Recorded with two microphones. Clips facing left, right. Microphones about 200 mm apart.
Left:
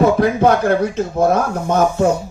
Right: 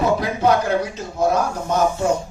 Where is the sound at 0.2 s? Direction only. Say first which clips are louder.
Left 5 dB; 55° left (ahead or behind).